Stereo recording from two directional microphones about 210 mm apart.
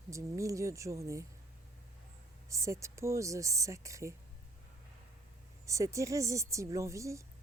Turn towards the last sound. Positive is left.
turn(degrees=-15)  # may be behind; listen again after turning